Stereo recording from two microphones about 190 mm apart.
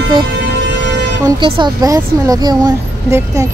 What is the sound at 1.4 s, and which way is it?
Speech, 20° right (ahead or behind).